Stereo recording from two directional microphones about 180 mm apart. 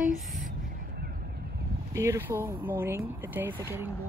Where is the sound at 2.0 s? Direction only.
15° right (ahead or behind).